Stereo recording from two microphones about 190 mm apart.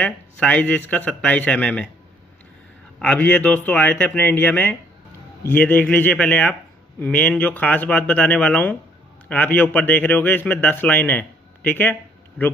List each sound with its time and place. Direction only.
0.0 s speech: 5° left (ahead or behind)
3.0 s a man's voice: 5° left (ahead or behind)